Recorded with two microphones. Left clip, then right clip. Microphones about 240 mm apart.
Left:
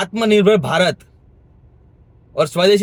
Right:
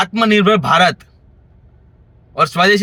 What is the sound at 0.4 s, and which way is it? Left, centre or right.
Speech, centre.